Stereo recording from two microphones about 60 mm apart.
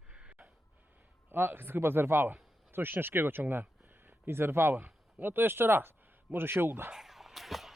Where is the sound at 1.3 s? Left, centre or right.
Right.